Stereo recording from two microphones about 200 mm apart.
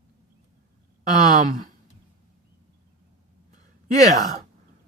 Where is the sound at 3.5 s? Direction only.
40° right (ahead or behind).